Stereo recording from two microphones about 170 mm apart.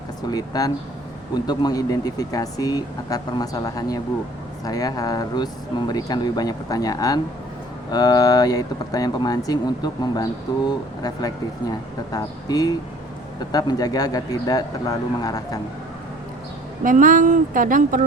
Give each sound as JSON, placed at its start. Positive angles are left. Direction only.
{"t": 0.3, "sound": "speech", "side_deg": 20}
{"t": 16.8, "sound": "speech", "side_deg": -50}